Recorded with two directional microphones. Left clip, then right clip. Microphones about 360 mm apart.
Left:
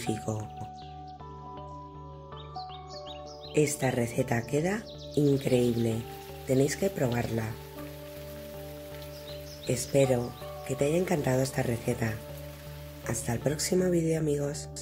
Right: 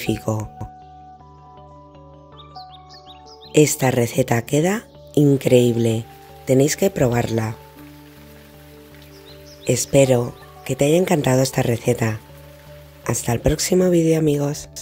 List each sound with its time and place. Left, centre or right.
0.0 s speech: right
3.5 s speech: right
9.7 s speech: right